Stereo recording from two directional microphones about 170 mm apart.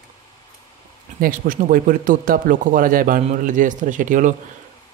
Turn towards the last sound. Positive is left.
turn(degrees=-50)  # may be behind; listen again after turning